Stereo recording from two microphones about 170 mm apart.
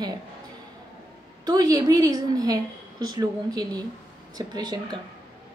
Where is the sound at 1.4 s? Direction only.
20° right (ahead or behind).